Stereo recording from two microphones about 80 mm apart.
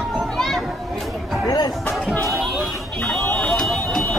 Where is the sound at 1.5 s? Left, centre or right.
Left.